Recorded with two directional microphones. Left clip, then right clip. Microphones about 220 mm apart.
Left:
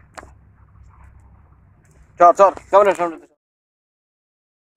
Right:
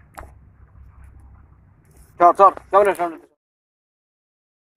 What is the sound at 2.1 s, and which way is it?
Speech, 40° left (ahead or behind).